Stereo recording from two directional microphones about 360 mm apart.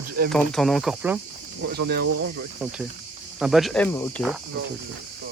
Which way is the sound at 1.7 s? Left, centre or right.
Right.